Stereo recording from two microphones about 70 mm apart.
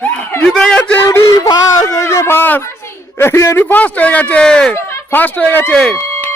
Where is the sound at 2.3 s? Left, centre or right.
Left.